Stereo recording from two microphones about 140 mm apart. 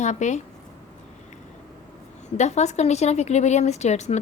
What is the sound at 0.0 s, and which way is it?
Speech, 60° left (ahead or behind).